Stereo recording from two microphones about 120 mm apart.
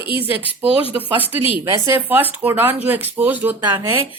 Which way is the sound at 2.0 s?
15° right (ahead or behind).